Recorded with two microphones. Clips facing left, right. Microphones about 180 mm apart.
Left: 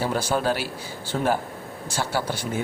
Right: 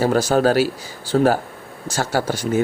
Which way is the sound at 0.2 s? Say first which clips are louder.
Right 8 dB; 40° right (ahead or behind).